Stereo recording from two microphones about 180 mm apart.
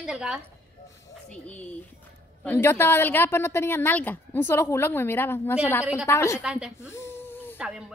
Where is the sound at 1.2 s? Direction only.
5° left (ahead or behind).